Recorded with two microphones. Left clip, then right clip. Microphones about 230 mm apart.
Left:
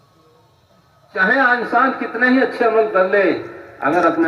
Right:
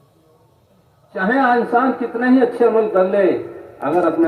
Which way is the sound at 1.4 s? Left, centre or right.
Left.